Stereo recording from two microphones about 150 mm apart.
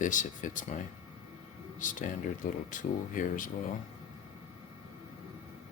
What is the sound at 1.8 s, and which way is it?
Speech, 60° left (ahead or behind).